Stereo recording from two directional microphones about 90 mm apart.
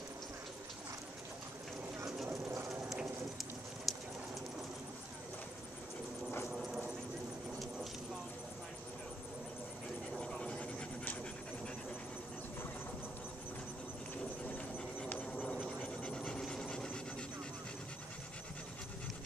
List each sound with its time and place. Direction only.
2.2 s bird: 30° right (ahead or behind)
3.9 s clip-clop: centre (ahead or behind)
6.5 s clip-clop: 5° right (ahead or behind)
10.1 s dog: 5° left (ahead or behind)
14.5 s a sound: 20° left (ahead or behind)
15.8 s train: 15° left (ahead or behind)